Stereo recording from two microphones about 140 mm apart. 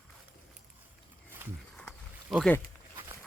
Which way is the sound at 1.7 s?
5° right (ahead or behind).